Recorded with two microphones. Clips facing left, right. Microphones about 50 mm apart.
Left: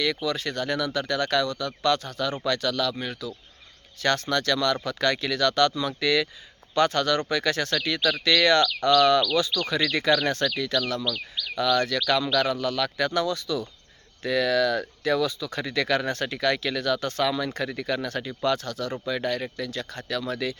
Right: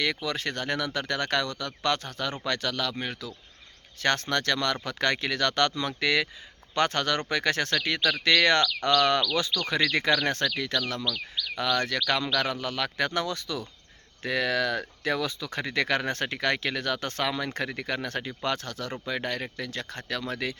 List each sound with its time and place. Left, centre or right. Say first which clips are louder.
0.0 s speech: left 2 dB; right